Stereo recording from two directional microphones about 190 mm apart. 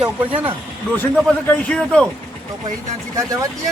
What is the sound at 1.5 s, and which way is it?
Speech, 5° left (ahead or behind).